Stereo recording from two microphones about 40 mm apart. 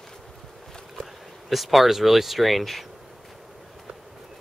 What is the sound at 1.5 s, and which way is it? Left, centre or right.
Speech, centre.